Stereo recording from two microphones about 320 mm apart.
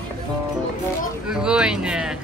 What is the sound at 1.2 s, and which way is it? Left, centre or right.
Speech, centre.